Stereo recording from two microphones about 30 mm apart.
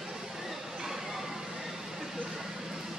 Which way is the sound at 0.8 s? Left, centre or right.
Centre.